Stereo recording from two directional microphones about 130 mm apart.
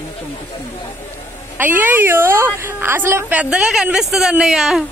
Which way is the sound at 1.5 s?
15° right (ahead or behind).